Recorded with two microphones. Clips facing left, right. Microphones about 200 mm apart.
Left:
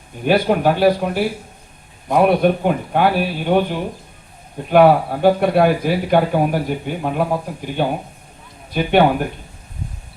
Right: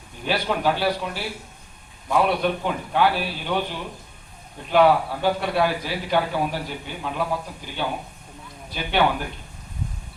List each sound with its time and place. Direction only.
0.3 s speech: 50° left (ahead or behind)